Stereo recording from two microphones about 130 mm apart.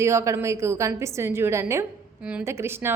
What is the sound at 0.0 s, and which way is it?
A woman's voice, 20° right (ahead or behind).